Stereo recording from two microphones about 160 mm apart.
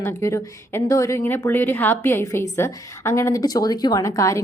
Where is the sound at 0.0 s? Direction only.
15° left (ahead or behind).